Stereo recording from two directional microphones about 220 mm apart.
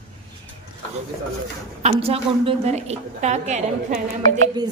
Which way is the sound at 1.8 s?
25° right (ahead or behind).